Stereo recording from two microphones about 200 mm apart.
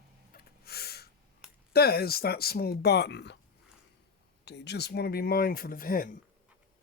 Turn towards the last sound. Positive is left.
turn(degrees=45)  # may be behind; listen again after turning